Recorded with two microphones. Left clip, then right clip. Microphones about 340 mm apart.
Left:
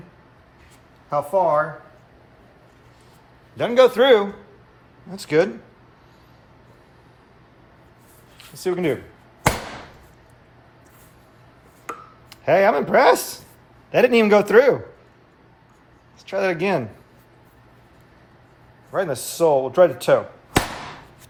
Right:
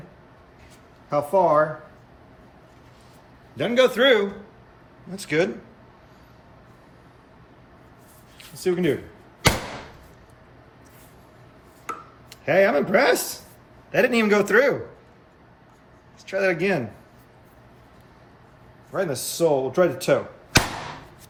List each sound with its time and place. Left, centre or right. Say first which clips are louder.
1.1 s speech: even; centre
3.6 s speech: left 3 dB; centre
8.5 s speech: even; centre
12.3 s speech: left 2 dB; centre
16.2 s speech: left 1 dB; centre
18.9 s speech: left 2 dB; centre